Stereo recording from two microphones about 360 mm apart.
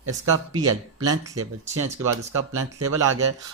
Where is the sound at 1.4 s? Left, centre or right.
Right.